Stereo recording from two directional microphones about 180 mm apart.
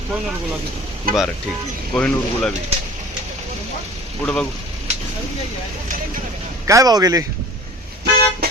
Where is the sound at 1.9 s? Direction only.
5° left (ahead or behind).